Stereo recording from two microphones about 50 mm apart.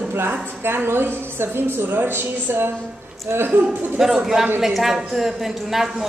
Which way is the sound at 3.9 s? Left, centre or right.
Centre.